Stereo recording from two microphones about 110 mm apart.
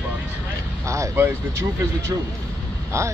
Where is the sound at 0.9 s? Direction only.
25° right (ahead or behind).